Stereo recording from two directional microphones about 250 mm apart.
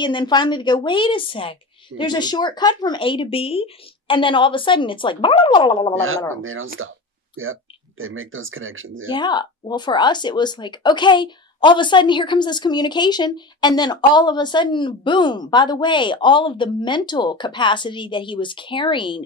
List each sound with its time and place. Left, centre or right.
0.0 s a woman's voice: centre
5.9 s speech: right
9.1 s speech: centre